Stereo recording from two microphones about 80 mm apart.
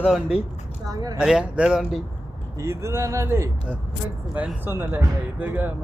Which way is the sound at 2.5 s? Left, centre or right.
Right.